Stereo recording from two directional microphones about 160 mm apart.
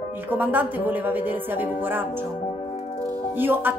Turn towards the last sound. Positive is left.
turn(degrees=-15)  # may be behind; listen again after turning